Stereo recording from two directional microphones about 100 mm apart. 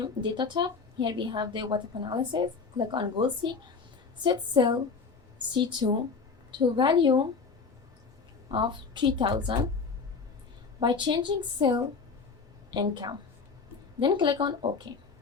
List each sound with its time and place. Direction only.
0.0 s a woman's voice: 50° right (ahead or behind)
8.4 s a woman's voice: 55° right (ahead or behind)
10.8 s a woman's voice: 50° right (ahead or behind)